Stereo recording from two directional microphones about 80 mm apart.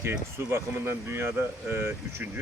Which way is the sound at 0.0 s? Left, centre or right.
Right.